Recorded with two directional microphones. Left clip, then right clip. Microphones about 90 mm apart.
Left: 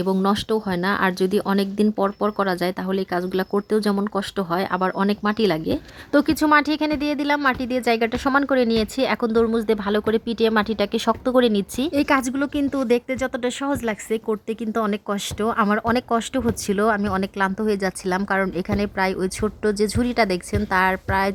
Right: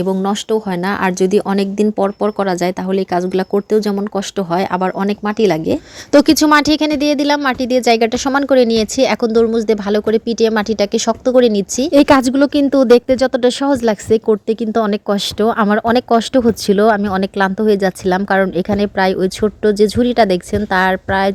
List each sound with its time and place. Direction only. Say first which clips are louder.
0.2 s speech: right 5 dB; 15° right (ahead or behind)
0.7 s speech: right 4 dB; 30° right (ahead or behind)
3.7 s speech: right 6 dB; 20° right (ahead or behind)
4.5 s a woman's voice: right 6 dB; 35° right (ahead or behind)
4.9 s speech: right 5 dB; 20° right (ahead or behind)
5.5 s a woman's voice: right 7 dB; 35° right (ahead or behind)
6.1 s a woman's voice: right 7 dB; 50° right (ahead or behind); by 9.3 s 35° right (ahead or behind)
9.3 s speech: right 7 dB; 20° right (ahead or behind)
11.9 s a woman's voice: right 11 dB; 65° right (ahead or behind)
12.7 s a woman's voice: right 13 dB; 45° right (ahead or behind); by 21.3 s 30° right (ahead or behind)